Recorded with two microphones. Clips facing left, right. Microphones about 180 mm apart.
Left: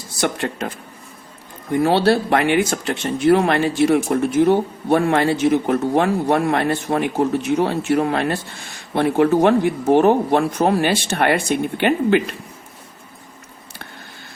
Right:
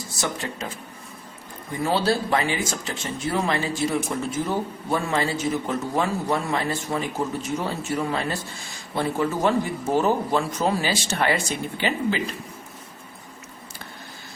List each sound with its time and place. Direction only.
0.2 s a man's voice: 60° left (ahead or behind)
1.8 s a man's voice: 65° left (ahead or behind)